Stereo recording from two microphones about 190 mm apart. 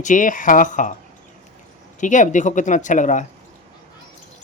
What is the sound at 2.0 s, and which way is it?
Speech, 40° left (ahead or behind).